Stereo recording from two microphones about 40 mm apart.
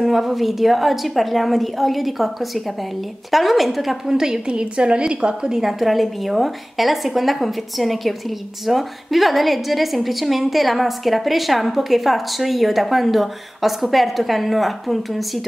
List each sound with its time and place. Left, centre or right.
0.0 s a woman's voice: centre
4.1 s a woman's voice: centre
5.6 s a woman's voice: centre